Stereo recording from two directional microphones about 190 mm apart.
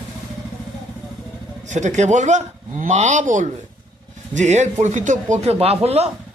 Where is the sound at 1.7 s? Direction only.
40° right (ahead or behind).